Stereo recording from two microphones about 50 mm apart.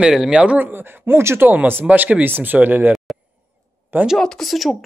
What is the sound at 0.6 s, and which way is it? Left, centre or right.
Speech, right.